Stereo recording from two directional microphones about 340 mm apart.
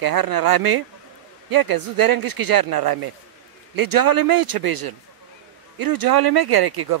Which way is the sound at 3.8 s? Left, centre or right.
Right.